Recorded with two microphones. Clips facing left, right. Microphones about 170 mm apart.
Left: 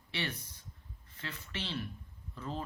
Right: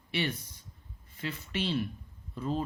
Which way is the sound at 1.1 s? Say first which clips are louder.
Right 8 dB; 15° right (ahead or behind).